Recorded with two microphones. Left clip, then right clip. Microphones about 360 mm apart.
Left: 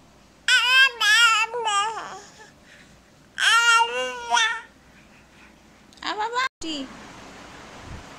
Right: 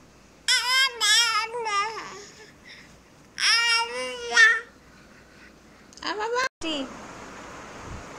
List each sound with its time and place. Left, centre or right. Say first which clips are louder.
0.5 s a sound: left 5 dB; centre
3.3 s babbling: left 5 dB; centre
5.9 s cat: left 1 dB; centre